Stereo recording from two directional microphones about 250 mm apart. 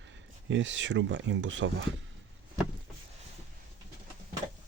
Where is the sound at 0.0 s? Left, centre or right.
Right.